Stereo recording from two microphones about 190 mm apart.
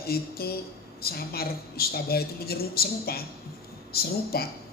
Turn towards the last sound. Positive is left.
turn(degrees=55)  # may be behind; listen again after turning